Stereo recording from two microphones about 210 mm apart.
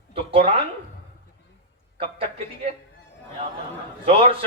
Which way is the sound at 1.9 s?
25° right (ahead or behind).